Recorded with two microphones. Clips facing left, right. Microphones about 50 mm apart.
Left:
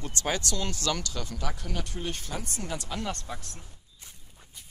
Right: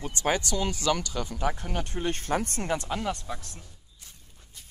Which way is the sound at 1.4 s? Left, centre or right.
Right.